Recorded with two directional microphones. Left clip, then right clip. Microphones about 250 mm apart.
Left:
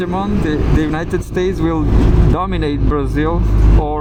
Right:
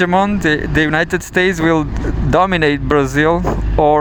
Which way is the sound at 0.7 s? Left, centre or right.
Right.